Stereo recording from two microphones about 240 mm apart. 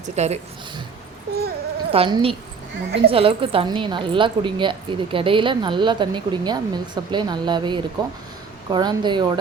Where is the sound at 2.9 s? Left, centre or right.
Right.